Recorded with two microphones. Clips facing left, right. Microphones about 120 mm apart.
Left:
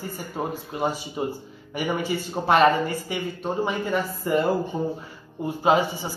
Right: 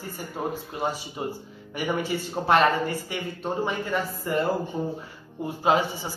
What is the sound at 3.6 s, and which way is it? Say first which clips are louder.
Speech: left 3 dB; 10° left (ahead or behind).